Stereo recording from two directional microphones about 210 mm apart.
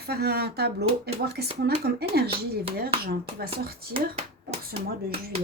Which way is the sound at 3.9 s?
30° right (ahead or behind).